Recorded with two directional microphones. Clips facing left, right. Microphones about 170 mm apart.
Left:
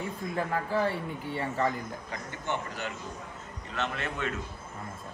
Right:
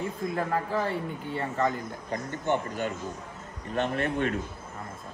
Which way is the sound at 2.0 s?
45° right (ahead or behind).